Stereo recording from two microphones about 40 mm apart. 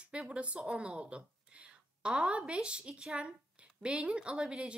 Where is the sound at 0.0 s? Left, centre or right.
Right.